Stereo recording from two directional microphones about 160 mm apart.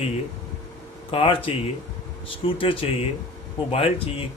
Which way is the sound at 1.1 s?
35° left (ahead or behind).